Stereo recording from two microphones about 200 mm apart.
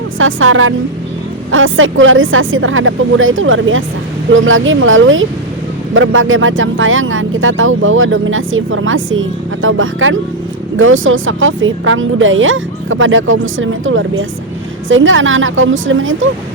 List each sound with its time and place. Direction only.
0.2 s a woman's voice: 80° right